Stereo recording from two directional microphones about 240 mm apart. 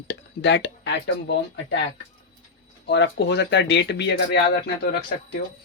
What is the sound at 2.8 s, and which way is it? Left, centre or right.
Speech, left.